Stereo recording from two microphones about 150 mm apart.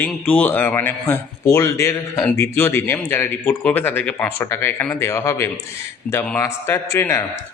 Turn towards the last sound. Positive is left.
turn(degrees=15)  # may be behind; listen again after turning